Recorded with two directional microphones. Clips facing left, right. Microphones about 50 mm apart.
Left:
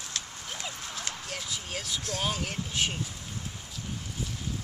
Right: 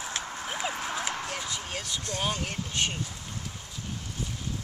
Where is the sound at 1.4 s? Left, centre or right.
Centre.